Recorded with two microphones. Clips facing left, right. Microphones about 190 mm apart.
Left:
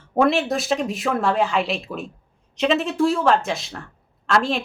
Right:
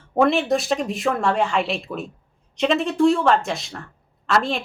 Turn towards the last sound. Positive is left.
turn(degrees=0)  # may be behind; listen again after turning